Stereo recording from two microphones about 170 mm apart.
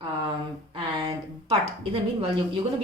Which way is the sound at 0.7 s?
30° right (ahead or behind).